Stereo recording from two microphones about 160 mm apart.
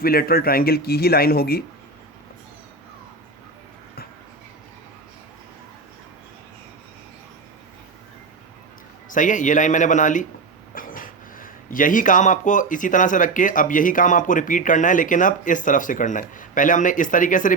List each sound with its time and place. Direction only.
0.0 s speech: 70° left (ahead or behind)
9.0 s a man's voice: 55° left (ahead or behind)